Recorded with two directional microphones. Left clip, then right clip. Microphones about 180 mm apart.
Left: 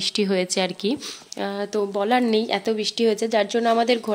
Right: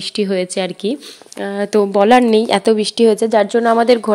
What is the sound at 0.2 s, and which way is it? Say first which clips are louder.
Speech: right 7 dB; 15° right (ahead or behind).